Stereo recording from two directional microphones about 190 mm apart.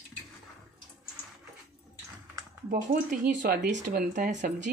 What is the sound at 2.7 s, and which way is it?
Speech, 45° right (ahead or behind).